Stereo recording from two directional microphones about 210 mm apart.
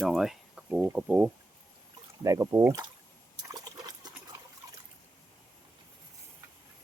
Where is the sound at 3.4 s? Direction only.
20° right (ahead or behind).